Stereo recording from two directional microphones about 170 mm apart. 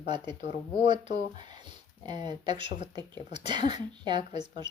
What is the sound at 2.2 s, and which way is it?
Speech, 25° right (ahead or behind).